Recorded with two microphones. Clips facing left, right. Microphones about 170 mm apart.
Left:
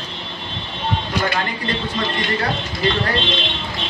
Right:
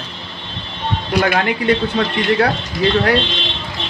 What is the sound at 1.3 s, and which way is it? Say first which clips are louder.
Speech: right 7 dB; 65° right (ahead or behind).